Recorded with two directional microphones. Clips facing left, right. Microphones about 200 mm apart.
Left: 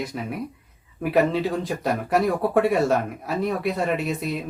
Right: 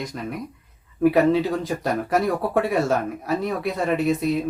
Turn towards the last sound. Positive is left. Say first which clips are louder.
# right 6 dB
turn(degrees=0)  # may be behind; listen again after turning